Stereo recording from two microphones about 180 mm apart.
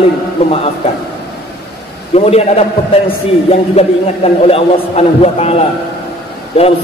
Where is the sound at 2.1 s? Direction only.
35° left (ahead or behind).